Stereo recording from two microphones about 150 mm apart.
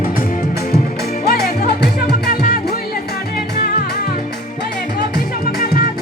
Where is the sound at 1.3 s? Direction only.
90° left.